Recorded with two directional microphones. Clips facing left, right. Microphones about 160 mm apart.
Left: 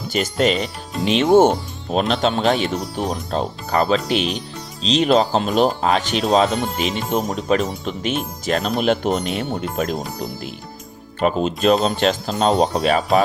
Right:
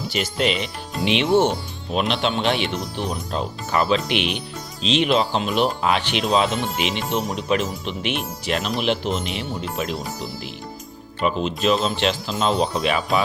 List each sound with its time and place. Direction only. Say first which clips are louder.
0.1 s speech: left 5 dB; 45° left (ahead or behind)
11.2 s speech: left 4 dB; 40° left (ahead or behind)